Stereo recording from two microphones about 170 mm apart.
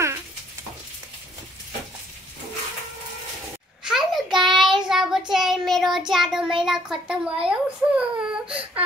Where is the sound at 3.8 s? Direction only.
Centre (ahead or behind).